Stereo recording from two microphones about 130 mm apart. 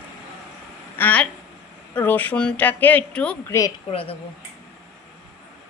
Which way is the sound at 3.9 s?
45° left (ahead or behind).